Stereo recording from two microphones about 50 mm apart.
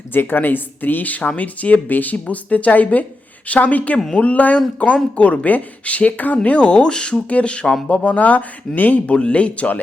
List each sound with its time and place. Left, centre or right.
0.1 s speech: left
9.1 s speech: left